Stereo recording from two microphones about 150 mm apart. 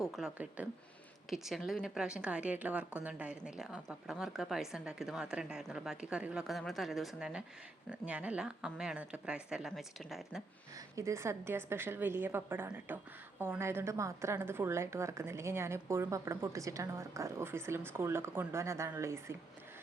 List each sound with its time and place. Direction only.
0.0 s a woman's voice: centre (ahead or behind)
10.8 s a woman's voice: 20° right (ahead or behind)